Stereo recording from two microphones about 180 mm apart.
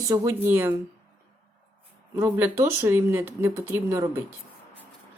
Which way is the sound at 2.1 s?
15° right (ahead or behind).